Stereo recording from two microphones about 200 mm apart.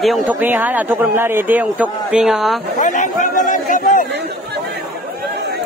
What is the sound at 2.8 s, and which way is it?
Chatter, 40° left (ahead or behind).